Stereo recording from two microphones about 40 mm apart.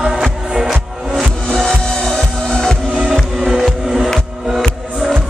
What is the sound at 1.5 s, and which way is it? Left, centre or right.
Music, centre.